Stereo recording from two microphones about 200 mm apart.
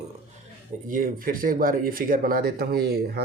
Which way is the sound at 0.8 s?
45° right (ahead or behind).